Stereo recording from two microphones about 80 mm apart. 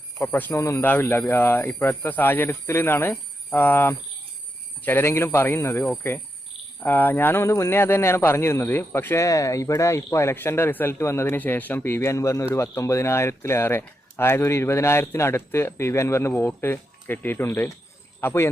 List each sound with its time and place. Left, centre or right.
0.2 s speech: left
0.5 s speech: left
0.9 s speech: left
9.2 s speech: left
11.3 s speech: left